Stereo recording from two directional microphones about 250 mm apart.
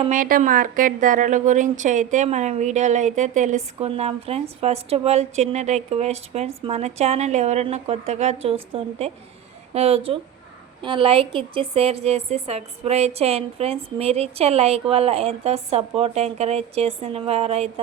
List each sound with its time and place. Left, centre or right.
0.0 s a woman's voice: right